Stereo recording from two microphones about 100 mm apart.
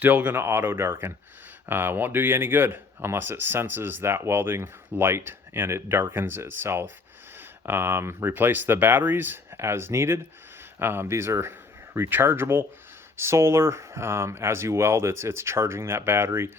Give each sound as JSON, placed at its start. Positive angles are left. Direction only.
{"t": 0.0, "sound": "speech", "side_deg": -20}